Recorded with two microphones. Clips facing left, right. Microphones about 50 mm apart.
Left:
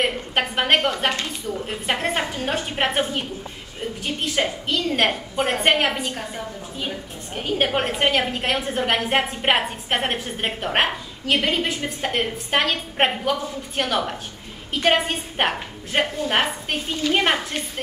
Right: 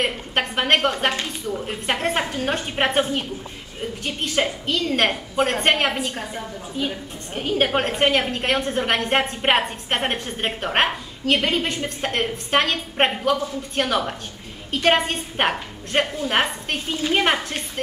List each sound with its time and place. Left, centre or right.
0.0 s a woman's voice: centre
1.1 s speech: centre
1.9 s a woman's voice: centre
7.3 s a woman's voice: centre